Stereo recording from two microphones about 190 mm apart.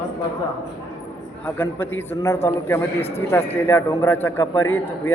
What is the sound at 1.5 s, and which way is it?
A man's voice, 10° left (ahead or behind).